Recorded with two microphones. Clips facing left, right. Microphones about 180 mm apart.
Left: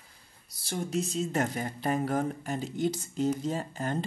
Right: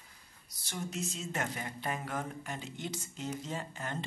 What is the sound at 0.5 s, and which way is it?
Speech, 35° left (ahead or behind).